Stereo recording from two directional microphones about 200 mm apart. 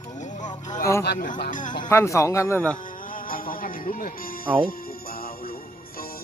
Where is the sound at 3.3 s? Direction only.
45° left (ahead or behind).